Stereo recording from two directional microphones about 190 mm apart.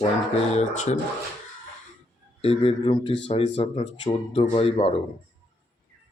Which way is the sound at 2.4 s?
30° left (ahead or behind).